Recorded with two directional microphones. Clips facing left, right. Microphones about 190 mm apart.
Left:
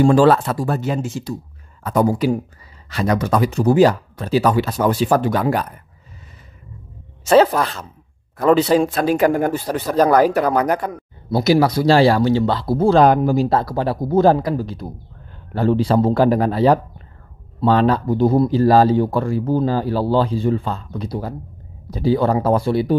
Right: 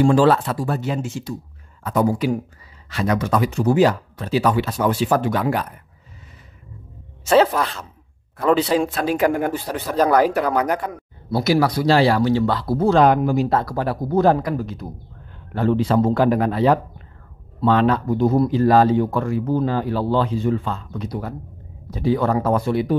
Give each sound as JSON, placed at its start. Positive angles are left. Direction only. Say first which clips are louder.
{"t": 0.0, "sound": "speech", "louder": "left 2 dB", "side_deg": 45}
{"t": 7.2, "sound": "speech", "louder": "left 3 dB", "side_deg": 40}
{"t": 11.3, "sound": "speech", "louder": "left 3 dB", "side_deg": 20}